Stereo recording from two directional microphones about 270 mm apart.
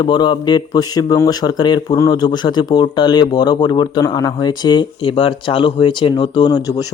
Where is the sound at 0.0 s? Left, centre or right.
Centre.